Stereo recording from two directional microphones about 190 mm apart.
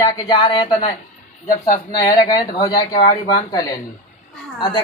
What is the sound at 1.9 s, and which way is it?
Speech, 20° left (ahead or behind).